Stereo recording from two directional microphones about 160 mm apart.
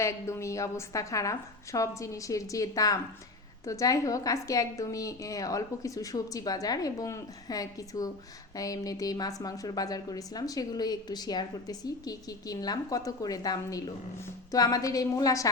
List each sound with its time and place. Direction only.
0.0 s a woman's voice: 20° left (ahead or behind)